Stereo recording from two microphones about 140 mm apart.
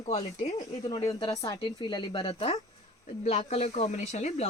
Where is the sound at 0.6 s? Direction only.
25° left (ahead or behind).